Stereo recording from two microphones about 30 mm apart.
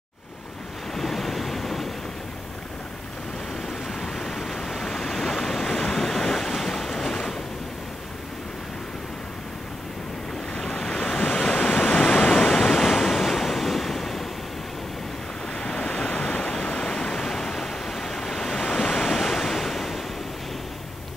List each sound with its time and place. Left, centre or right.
0.9 s waves: centre
3.6 s waves: centre
10.8 s waves: centre
11.1 s waves: left
12.1 s waves: left
12.4 s waves: centre
15.5 s waves: left; by 20.0 s centre